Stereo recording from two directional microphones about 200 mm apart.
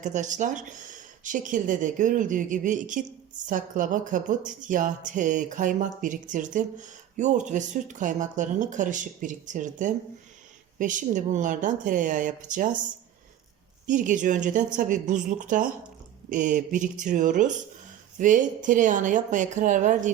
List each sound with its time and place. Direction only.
0.0 s speech: 35° right (ahead or behind)
13.8 s speech: 40° right (ahead or behind)